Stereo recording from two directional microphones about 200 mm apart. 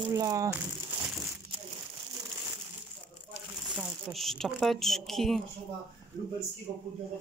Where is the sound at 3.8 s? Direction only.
Centre (ahead or behind).